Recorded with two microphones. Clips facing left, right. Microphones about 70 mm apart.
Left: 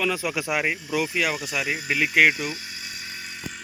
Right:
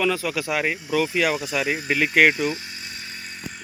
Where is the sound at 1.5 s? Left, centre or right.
Right.